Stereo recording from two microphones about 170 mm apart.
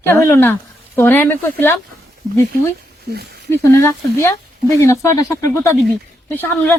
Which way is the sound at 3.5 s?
15° left (ahead or behind).